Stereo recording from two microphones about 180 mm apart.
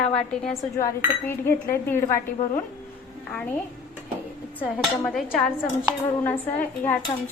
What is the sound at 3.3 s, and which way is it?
Speech, 5° left (ahead or behind).